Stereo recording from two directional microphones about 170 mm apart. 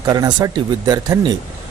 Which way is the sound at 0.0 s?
25° right (ahead or behind).